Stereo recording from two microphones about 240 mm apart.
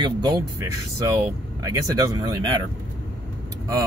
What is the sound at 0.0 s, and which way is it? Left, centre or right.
Speech, centre.